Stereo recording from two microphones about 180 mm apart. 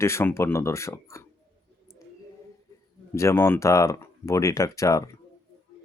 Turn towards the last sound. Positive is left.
turn(degrees=20)  # may be behind; listen again after turning